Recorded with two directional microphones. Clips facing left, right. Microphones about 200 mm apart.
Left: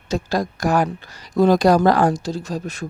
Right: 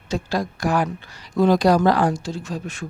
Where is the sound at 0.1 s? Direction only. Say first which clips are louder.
Left 2 dB; 40° left (ahead or behind).